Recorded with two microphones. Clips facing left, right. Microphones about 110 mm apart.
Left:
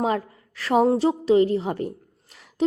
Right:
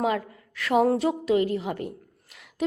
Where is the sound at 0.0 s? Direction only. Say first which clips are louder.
Left 2 dB; 35° left (ahead or behind).